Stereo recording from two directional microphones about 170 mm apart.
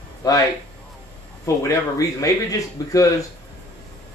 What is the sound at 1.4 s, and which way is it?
Speech, 15° left (ahead or behind).